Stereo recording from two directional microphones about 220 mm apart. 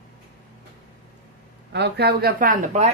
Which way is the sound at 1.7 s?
50° right (ahead or behind).